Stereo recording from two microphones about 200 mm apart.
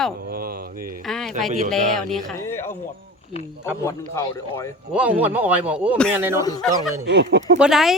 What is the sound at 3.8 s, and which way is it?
Speech, 15° left (ahead or behind).